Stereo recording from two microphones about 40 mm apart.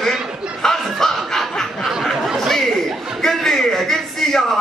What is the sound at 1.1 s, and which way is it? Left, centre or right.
Snicker, centre.